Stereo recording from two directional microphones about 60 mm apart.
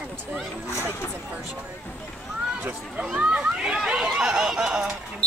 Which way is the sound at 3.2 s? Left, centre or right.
Centre.